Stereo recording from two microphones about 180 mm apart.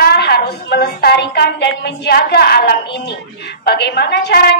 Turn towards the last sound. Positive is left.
turn(degrees=65)  # may be behind; listen again after turning